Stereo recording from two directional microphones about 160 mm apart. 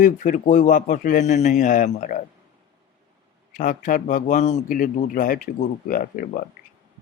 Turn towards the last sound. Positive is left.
turn(degrees=65)  # may be behind; listen again after turning